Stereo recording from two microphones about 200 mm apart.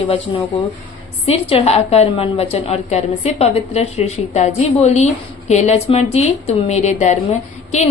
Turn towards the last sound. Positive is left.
turn(degrees=35)  # may be behind; listen again after turning